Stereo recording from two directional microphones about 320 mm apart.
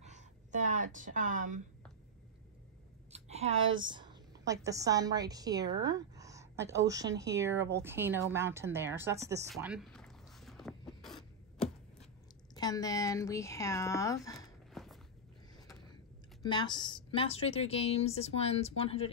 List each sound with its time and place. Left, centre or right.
0.0 s speech: right
3.1 s a sound: centre
3.5 s a woman's voice: right
3.8 s a woman's voice: centre
11.0 s a sound: centre
12.5 s speech: centre
16.4 s a woman's voice: centre